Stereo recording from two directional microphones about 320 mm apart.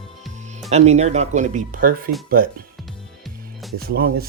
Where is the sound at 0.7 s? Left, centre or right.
Right.